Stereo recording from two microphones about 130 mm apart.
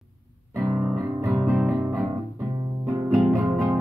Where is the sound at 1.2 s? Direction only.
20° right (ahead or behind).